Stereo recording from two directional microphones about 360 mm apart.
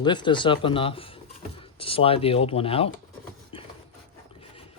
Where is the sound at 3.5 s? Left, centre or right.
Centre.